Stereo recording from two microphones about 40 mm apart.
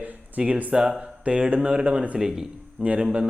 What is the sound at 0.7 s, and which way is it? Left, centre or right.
Speech, centre.